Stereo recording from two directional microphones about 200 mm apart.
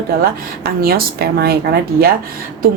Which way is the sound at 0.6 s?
50° right (ahead or behind).